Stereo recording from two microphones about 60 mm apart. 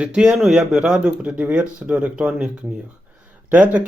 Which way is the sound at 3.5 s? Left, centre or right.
Right.